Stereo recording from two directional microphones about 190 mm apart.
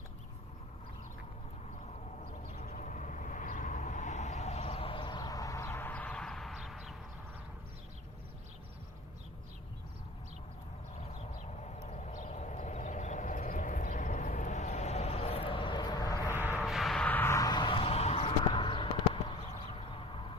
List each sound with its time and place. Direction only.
2.5 s vehicle: 40° left (ahead or behind); by 6.9 s centre (ahead or behind)
11.9 s vehicle: 35° left (ahead or behind); by 16.6 s 10° left (ahead or behind)
16.6 s a sound: centre (ahead or behind); by 19.2 s 25° left (ahead or behind)